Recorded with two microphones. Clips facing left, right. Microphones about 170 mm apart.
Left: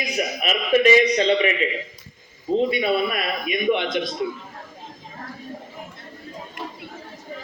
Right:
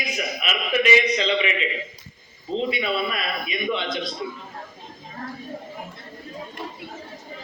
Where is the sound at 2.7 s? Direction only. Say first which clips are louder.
Left 4 dB; 45° left (ahead or behind).